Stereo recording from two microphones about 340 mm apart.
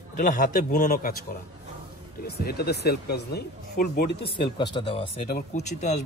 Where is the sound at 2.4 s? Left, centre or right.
Left.